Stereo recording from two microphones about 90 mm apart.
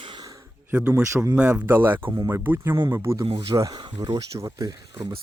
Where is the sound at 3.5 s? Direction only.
40° right (ahead or behind).